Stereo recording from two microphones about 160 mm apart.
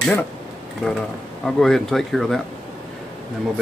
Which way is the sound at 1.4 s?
Centre (ahead or behind).